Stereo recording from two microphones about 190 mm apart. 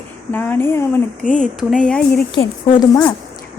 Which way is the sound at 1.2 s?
40° left (ahead or behind).